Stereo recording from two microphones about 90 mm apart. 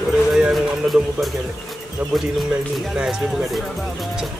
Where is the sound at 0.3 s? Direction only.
5° right (ahead or behind).